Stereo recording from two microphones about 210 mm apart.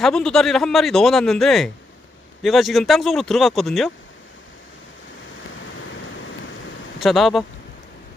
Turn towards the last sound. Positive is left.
turn(degrees=0)  # may be behind; listen again after turning